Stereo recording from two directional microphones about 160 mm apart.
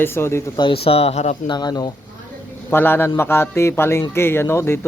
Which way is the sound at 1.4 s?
25° left (ahead or behind).